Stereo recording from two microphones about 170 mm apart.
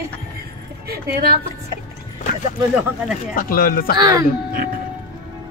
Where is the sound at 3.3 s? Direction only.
60° left (ahead or behind).